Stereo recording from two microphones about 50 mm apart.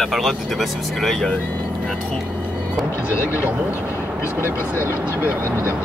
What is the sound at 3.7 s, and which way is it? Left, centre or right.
Speech, left.